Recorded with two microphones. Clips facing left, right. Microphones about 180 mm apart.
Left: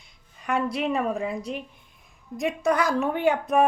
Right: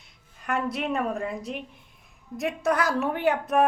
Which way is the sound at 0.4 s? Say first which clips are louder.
Left 2 dB; centre (ahead or behind).